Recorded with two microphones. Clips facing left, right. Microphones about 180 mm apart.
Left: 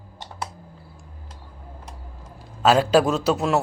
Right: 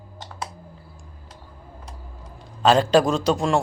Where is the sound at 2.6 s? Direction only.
5° left (ahead or behind).